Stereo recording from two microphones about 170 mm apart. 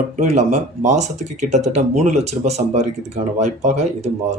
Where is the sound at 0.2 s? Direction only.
45° right (ahead or behind).